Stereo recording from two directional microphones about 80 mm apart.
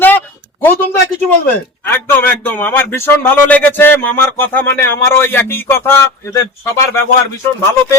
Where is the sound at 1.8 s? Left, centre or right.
Left.